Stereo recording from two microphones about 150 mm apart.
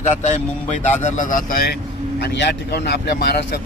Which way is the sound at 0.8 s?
50° left (ahead or behind).